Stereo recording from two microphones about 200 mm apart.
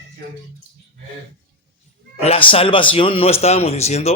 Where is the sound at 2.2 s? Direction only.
25° left (ahead or behind).